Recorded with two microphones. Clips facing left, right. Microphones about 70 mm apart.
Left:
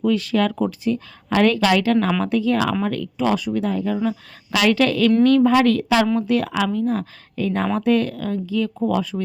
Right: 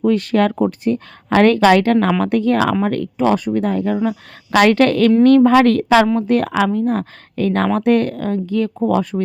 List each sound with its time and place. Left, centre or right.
0.0 s speech: right
7.8 s speech: right